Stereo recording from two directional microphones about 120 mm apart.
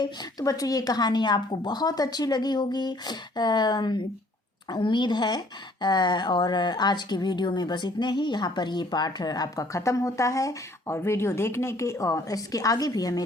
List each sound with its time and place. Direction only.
0.0 s speech: 30° left (ahead or behind)